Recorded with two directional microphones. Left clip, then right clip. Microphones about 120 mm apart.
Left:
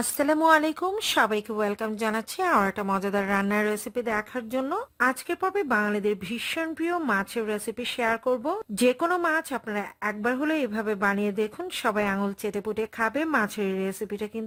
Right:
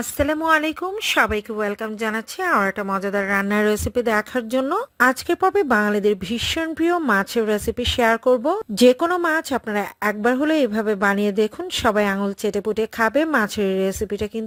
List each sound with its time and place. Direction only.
0.2 s speech: centre (ahead or behind)
3.5 s a woman's voice: 35° right (ahead or behind)